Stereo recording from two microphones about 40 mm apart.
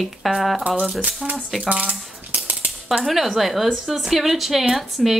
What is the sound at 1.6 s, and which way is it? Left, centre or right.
Speech, right.